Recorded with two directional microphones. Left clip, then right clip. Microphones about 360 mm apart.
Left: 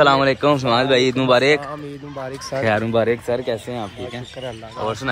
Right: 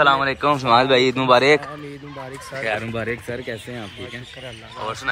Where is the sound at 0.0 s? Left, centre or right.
Centre.